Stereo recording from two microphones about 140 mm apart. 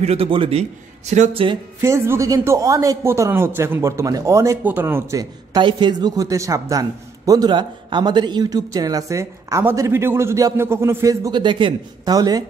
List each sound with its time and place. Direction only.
0.0 s a man's voice: 45° right (ahead or behind)
1.8 s a man's voice: 20° right (ahead or behind)